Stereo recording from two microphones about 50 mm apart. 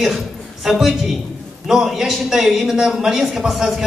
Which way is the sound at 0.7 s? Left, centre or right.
Centre.